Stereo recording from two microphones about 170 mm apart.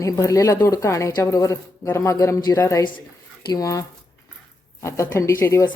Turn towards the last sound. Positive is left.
turn(degrees=15)  # may be behind; listen again after turning